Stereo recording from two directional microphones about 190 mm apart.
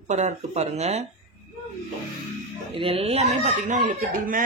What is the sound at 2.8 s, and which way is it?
Speech, 30° right (ahead or behind).